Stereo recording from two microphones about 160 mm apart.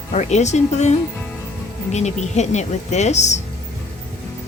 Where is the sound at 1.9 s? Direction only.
45° left (ahead or behind).